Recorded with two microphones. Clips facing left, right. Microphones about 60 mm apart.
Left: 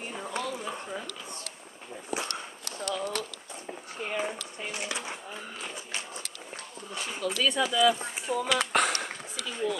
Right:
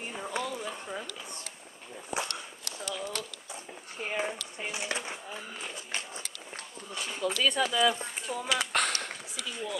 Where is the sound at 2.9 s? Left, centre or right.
Centre.